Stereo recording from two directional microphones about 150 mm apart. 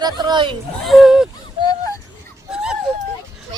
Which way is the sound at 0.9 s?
Centre (ahead or behind).